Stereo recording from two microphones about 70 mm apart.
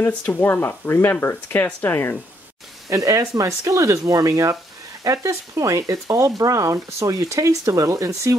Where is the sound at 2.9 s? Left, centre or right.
Right.